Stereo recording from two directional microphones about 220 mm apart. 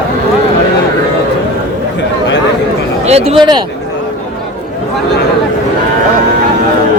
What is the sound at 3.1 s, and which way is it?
Speech, 25° right (ahead or behind).